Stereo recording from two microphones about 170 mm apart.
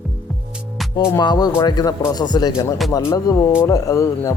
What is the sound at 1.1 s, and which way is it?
Speech, 25° left (ahead or behind).